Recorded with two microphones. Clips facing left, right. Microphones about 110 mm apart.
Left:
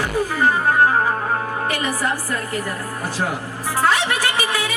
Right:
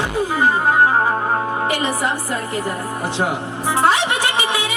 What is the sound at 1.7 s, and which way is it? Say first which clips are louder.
Speech: right 2 dB; 20° right (ahead or behind).